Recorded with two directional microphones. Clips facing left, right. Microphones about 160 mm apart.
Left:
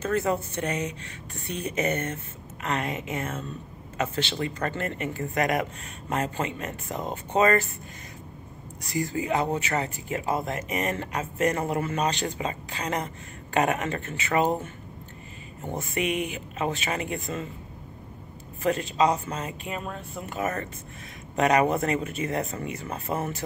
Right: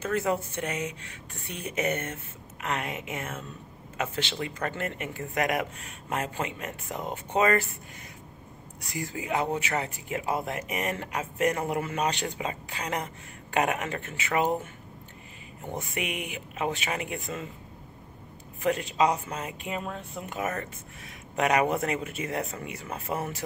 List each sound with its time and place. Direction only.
0.0 s speech: 10° right (ahead or behind)
8.9 s speech: 10° right (ahead or behind)
15.8 s speech: 10° right (ahead or behind)
18.6 s speech: 10° right (ahead or behind)